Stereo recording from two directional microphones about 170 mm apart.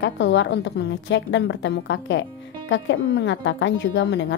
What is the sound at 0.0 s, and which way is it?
A woman's voice, 90° left.